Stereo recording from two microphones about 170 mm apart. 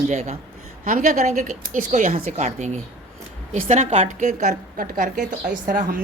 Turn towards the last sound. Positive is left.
turn(degrees=-55)  # may be behind; listen again after turning